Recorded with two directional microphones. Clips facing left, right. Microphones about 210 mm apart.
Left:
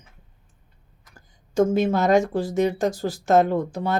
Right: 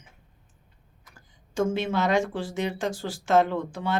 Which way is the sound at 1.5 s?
40° left (ahead or behind).